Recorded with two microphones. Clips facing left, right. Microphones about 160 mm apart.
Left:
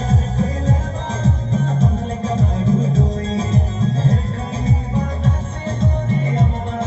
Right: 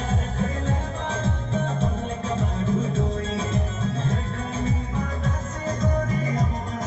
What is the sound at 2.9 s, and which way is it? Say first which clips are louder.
Music: left 6 dB; 35° left (ahead or behind).